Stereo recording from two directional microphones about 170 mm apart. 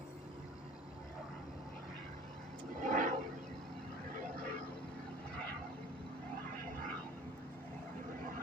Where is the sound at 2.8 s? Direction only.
50° right (ahead or behind).